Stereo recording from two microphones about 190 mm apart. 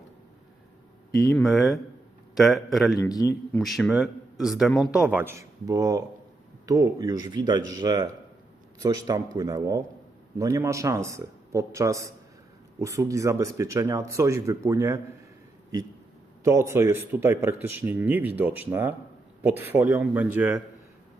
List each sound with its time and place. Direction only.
1.4 s a man's voice: centre (ahead or behind)
3.0 s a man's voice: 20° left (ahead or behind)
3.6 s a man's voice: centre (ahead or behind); by 15.0 s 15° right (ahead or behind)
16.4 s speech: 15° right (ahead or behind)